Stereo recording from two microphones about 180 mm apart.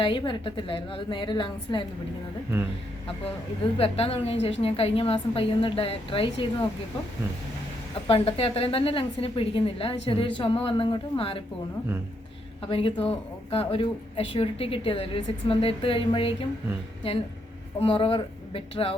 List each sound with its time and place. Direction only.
0.0 s a woman's voice: 25° left (ahead or behind)
3.2 s a woman's voice: 30° left (ahead or behind)
8.0 s a woman's voice: 30° left (ahead or behind)
12.6 s a woman's voice: 30° left (ahead or behind)
17.7 s a woman's voice: 30° left (ahead or behind)